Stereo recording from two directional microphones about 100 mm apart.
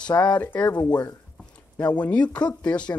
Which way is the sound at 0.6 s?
45° left (ahead or behind).